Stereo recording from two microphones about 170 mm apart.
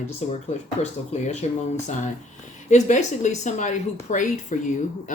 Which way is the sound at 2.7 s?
45° left (ahead or behind).